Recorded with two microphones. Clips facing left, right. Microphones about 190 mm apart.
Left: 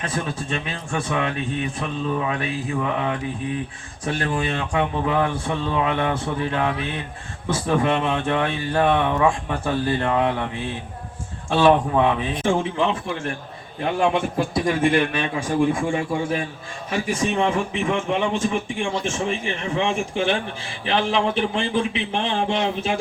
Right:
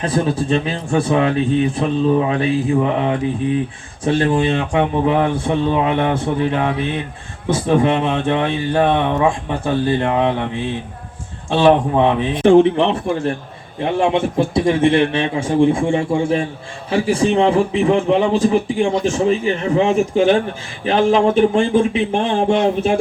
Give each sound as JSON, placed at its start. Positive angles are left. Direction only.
{"t": 0.0, "sound": "a man's voice", "side_deg": -35}
{"t": 11.5, "sound": "speech", "side_deg": -25}
{"t": 12.4, "sound": "a man's voice", "side_deg": -65}
{"t": 13.8, "sound": "a man's voice", "side_deg": -25}